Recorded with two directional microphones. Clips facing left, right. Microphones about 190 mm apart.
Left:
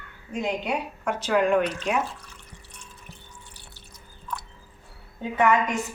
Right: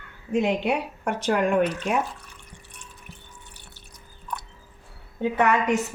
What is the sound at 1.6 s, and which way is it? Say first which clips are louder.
Speech: right 3 dB; 55° right (ahead or behind).